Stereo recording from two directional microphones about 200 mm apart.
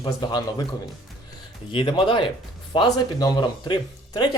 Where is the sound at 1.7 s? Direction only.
25° left (ahead or behind).